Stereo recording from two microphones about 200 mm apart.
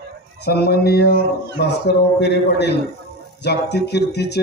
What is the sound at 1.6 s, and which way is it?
A man's voice, 55° left (ahead or behind).